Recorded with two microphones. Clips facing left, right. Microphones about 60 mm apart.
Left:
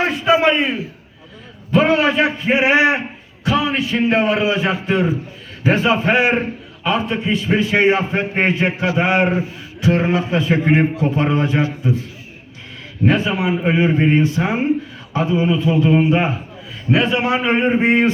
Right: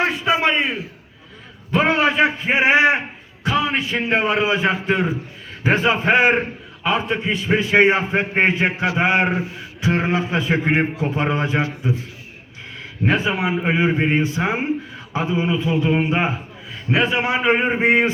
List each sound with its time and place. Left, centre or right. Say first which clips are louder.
0.0 s a sound: left 3 dB; centre
0.4 s a man's voice: left 3 dB; centre
1.7 s a man's voice: left 3 dB; right
13.1 s a man's voice: left 2 dB; right